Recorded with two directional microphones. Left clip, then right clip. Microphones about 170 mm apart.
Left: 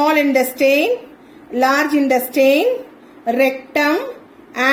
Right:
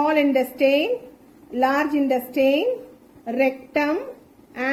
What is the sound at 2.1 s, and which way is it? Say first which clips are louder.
A woman's voice: left 7 dB; 60° left (ahead or behind).